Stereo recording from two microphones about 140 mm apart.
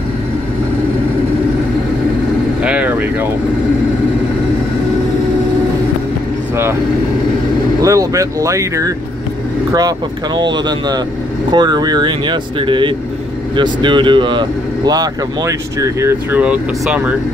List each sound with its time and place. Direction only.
2.6 s vehicle: 10° right (ahead or behind)
6.5 s vehicle: 15° right (ahead or behind)
7.8 s speech: 25° right (ahead or behind)